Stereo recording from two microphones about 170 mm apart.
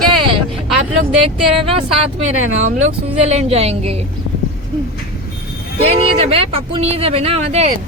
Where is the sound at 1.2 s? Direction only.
35° right (ahead or behind).